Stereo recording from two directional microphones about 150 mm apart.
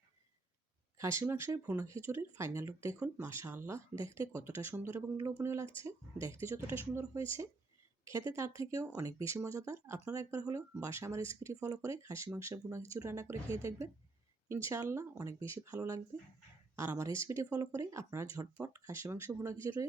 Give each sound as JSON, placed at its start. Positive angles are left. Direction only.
{"t": 0.9, "sound": "speech", "side_deg": -20}